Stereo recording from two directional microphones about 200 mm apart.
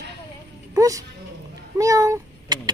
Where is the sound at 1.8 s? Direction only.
15° right (ahead or behind).